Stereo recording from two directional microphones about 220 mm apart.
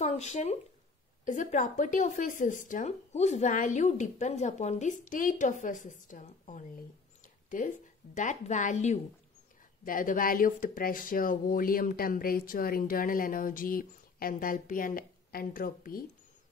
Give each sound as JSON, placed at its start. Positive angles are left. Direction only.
{"t": 0.0, "sound": "speech", "side_deg": 30}